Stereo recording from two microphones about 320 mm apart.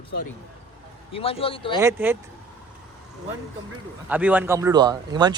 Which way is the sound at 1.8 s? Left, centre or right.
Centre.